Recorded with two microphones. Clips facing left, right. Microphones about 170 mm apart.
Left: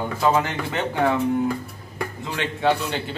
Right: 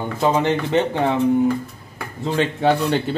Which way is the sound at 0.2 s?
25° right (ahead or behind).